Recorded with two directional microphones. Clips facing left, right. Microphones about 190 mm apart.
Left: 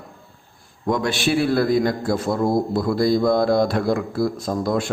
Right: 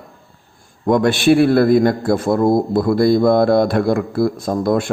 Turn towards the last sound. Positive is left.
turn(degrees=-55)  # may be behind; listen again after turning